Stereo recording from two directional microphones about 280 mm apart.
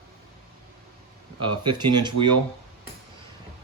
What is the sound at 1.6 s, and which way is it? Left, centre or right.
Speech, centre.